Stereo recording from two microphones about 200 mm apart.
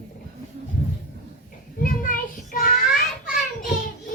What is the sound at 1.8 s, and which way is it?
Child singing, 45° left (ahead or behind).